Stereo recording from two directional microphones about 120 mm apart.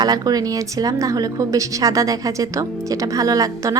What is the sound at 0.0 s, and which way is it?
A woman's voice, 35° right (ahead or behind).